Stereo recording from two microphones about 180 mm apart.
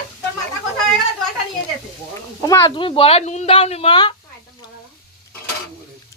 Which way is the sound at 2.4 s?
15° left (ahead or behind).